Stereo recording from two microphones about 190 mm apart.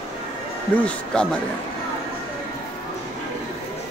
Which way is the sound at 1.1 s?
5° left (ahead or behind).